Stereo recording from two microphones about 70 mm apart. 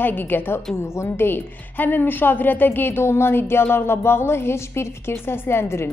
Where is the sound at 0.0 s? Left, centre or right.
Left.